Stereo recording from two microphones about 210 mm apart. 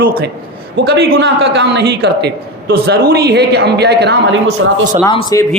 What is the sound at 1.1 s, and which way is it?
A man's voice, 60° right (ahead or behind).